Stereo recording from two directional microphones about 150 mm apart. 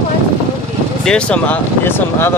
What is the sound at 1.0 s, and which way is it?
Speech, 5° left (ahead or behind).